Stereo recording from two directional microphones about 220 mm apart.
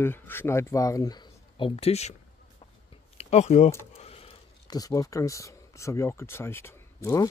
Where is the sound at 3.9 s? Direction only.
25° left (ahead or behind).